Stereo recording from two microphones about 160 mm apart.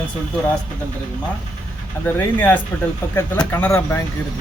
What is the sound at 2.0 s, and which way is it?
Speech, 10° left (ahead or behind).